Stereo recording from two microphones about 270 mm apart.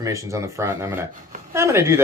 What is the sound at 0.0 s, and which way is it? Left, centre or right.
Speech, centre.